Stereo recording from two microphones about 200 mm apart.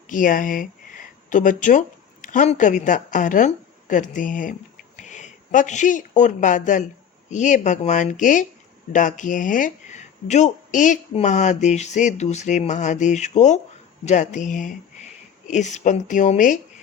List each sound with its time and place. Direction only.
0.1 s a woman's voice: 40° left (ahead or behind)